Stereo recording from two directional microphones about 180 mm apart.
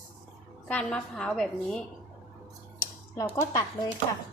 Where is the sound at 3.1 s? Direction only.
15° left (ahead or behind).